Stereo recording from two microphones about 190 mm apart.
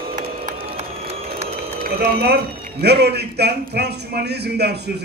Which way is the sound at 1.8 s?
60° right (ahead or behind).